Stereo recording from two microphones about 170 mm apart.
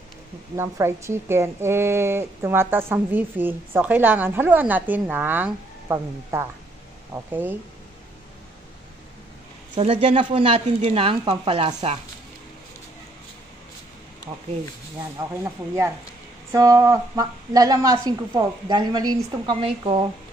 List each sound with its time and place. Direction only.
0.6 s a woman's voice: 15° right (ahead or behind)
9.8 s speech: 35° right (ahead or behind)
15.0 s a woman's voice: 20° right (ahead or behind)